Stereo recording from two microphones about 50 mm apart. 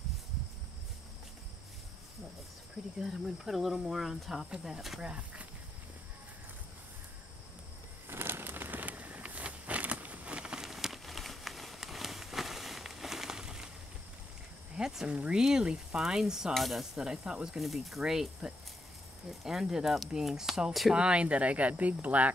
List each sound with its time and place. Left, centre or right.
3.0 s speech: centre
5.0 s speech: right
8.1 s a sound: right; by 10.7 s centre
10.7 s a sound: centre
14.8 s a sound: centre
15.0 s speech: right
16.5 s speech: centre
17.0 s speech: centre
17.6 s speech: centre; by 22.3 s right